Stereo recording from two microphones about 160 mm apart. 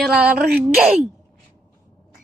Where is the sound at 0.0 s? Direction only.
5° right (ahead or behind).